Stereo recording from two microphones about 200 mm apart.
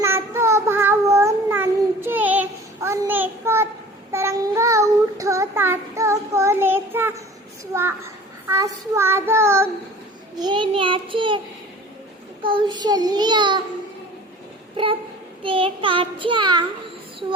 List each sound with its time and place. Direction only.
0.0 s child singing: 15° right (ahead or behind)
12.4 s child singing: 25° right (ahead or behind)
15.4 s child singing: 25° right (ahead or behind)